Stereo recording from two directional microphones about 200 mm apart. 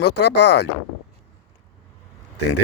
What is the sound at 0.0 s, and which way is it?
Speech, 55° left (ahead or behind).